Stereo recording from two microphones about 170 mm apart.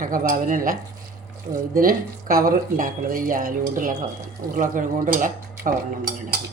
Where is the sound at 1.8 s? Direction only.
60° right (ahead or behind).